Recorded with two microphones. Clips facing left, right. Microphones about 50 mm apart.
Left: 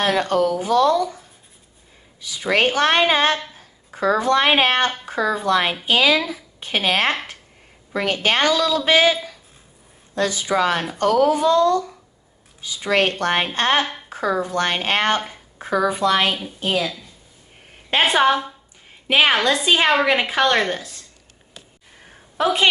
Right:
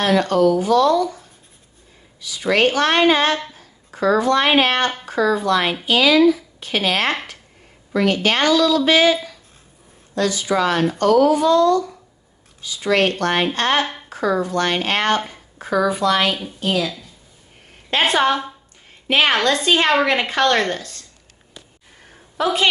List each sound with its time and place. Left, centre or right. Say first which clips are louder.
0.2 s speech: right 3 dB; left
2.4 s speech: right 1 dB; left
3.5 s a sound: right 3 dB; left
4.5 s a woman's voice: right 1 dB; left
10.1 s a woman's voice: right 1 dB; left; by 21.0 s centre
22.4 s speech: even; left